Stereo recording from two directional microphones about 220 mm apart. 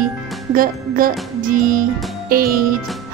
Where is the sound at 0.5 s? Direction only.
40° right (ahead or behind).